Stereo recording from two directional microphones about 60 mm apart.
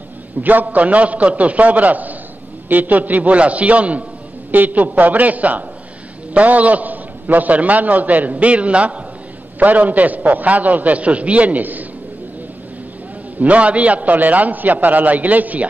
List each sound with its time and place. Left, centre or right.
0.4 s a man's voice: right
13.4 s a man's voice: right